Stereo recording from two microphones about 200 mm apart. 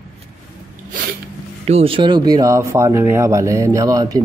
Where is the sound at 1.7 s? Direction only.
30° right (ahead or behind).